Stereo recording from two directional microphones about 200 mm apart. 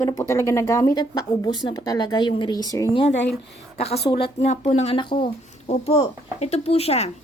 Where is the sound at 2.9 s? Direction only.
30° left (ahead or behind).